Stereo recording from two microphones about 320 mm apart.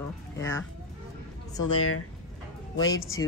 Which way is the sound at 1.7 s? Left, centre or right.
Left.